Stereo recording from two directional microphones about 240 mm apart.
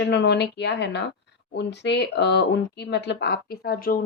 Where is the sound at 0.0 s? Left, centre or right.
Left.